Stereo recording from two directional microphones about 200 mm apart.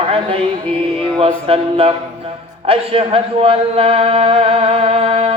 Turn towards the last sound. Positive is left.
turn(degrees=-30)  # may be behind; listen again after turning